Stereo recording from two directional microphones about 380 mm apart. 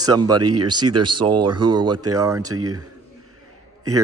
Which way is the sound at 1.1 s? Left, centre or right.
Centre.